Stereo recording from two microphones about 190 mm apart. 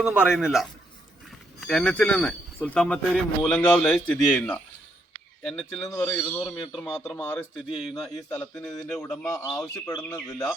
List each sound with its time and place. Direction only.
0.0 s speech: 5° right (ahead or behind)
6.7 s speech: centre (ahead or behind)
7.2 s speech: 10° left (ahead or behind)
7.7 s speech: 5° right (ahead or behind)
9.2 s speech: 15° left (ahead or behind)